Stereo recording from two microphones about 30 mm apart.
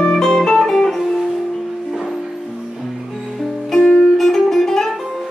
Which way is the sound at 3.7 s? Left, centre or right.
Left.